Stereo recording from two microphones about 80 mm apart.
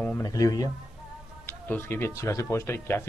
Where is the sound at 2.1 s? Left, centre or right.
Left.